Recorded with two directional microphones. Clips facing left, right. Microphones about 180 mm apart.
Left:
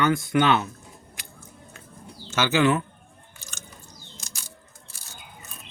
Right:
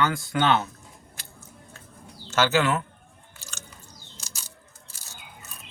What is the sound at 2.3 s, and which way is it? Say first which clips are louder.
Speech: right 1 dB; 15° left (ahead or behind).